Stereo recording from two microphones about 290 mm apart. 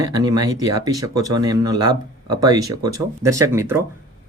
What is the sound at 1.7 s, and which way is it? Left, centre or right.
Speech, right.